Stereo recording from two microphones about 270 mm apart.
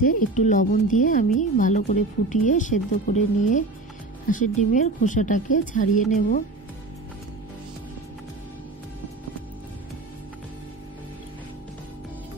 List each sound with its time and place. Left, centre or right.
0.0 s speech: left